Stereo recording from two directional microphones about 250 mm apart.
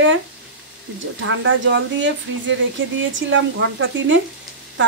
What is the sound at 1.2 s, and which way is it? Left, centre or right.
Speech, right.